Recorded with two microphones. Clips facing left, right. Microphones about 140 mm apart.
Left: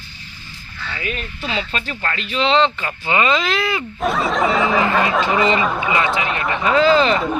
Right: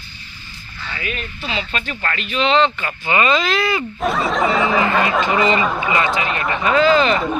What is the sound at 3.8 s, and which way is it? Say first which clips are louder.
Speech: even; centre (ahead or behind).